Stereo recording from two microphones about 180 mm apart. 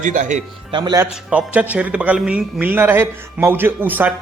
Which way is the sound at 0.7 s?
25° right (ahead or behind).